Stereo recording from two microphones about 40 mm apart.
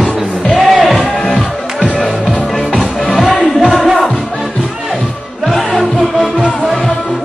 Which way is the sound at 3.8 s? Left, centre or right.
Centre.